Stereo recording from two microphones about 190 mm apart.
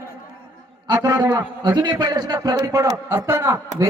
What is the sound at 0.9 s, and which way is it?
A man's voice, 20° right (ahead or behind).